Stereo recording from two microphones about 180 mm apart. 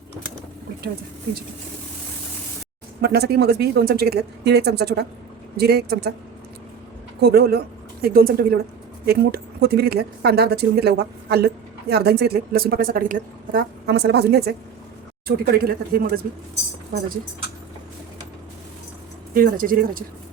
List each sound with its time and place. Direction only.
3.0 s a woman's voice: 60° right (ahead or behind)
7.2 s a woman's voice: 65° right (ahead or behind)
19.3 s speech: 50° right (ahead or behind)